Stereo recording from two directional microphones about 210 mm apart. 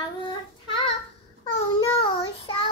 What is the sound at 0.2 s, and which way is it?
Child singing, 20° left (ahead or behind).